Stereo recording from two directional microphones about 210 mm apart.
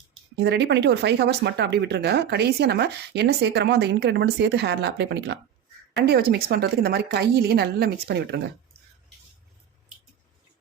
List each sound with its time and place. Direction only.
0.3 s speech: 55° right (ahead or behind)